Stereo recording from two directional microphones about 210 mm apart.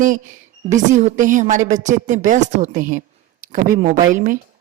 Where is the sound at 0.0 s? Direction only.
35° right (ahead or behind).